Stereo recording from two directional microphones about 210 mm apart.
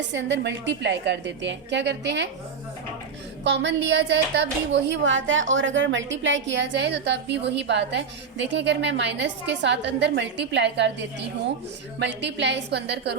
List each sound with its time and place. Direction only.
0.1 s a woman's voice: 60° right (ahead or behind)
3.4 s a woman's voice: 55° right (ahead or behind)
11.9 s a woman's voice: 55° right (ahead or behind)